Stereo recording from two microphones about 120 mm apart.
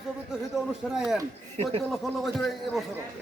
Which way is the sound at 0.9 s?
5° right (ahead or behind).